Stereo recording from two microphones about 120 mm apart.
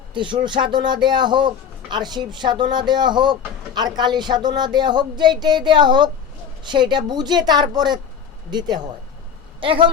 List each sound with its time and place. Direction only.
0.1 s speech: 40° right (ahead or behind)